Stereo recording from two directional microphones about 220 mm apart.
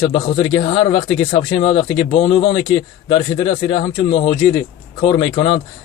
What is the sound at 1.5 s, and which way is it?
Speech, 20° left (ahead or behind).